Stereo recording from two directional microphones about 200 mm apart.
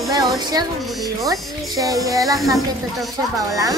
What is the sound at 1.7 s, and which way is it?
Speech, 20° right (ahead or behind).